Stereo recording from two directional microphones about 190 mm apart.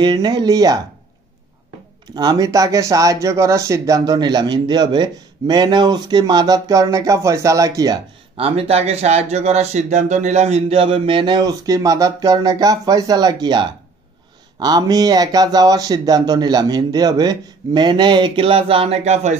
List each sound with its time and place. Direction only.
0.0 s speech: 20° right (ahead or behind)
2.1 s speech: 20° right (ahead or behind)